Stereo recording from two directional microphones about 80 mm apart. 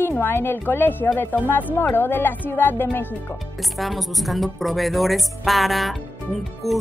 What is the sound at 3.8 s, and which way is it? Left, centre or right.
A woman's voice, centre.